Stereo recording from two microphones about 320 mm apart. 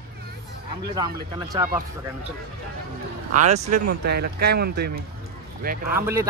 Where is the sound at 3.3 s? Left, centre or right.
Right.